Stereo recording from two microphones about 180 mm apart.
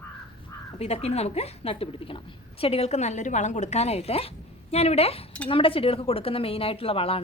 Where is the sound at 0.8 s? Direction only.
35° left (ahead or behind).